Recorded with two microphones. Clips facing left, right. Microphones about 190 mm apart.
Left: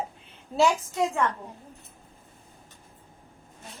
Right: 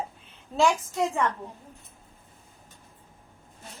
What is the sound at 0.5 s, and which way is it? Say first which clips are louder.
Speech: left 1 dB; 5° left (ahead or behind).